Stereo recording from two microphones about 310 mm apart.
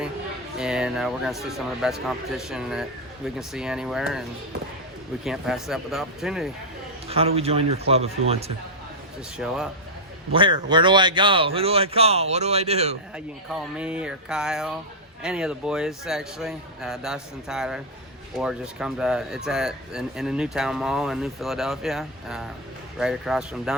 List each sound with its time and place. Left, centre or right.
0.6 s speech: centre
5.2 s speech: centre
7.1 s speech: centre
9.4 s speech: centre
10.3 s a man's voice: centre
13.1 s speech: centre